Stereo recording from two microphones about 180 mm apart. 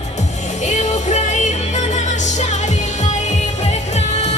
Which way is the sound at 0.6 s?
40° left (ahead or behind).